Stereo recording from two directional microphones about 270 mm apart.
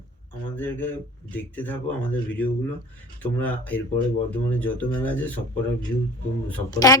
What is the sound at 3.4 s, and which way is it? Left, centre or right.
A woman's voice, centre.